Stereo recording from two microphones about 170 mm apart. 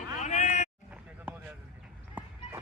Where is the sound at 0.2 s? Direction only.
45° left (ahead or behind).